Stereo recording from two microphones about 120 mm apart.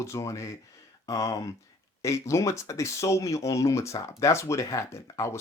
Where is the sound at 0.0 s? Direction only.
25° left (ahead or behind).